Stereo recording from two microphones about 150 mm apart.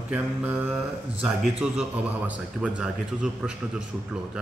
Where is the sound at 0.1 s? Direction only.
10° right (ahead or behind).